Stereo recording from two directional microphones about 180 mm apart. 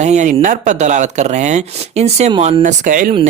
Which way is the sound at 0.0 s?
40° right (ahead or behind).